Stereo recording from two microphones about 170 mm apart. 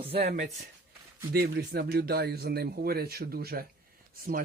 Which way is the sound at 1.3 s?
65° right (ahead or behind).